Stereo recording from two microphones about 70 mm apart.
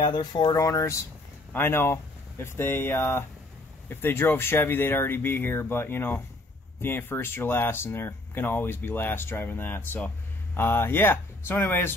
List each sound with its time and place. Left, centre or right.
0.1 s speech: left
0.6 s speech: left
1.5 s speech: left